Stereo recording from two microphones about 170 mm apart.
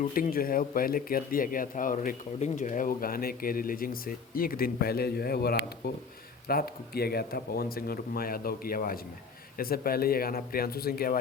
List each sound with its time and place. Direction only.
0.0 s speech: 60° left (ahead or behind)